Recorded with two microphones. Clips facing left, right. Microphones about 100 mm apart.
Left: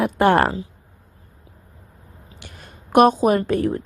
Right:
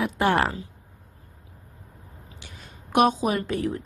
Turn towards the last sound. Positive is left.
turn(degrees=45)  # may be behind; listen again after turning